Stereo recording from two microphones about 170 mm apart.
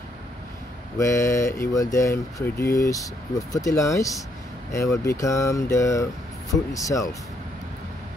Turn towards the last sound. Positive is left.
turn(degrees=20)  # may be behind; listen again after turning